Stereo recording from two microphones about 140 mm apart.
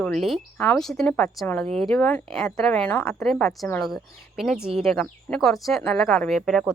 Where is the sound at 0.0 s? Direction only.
5° left (ahead or behind).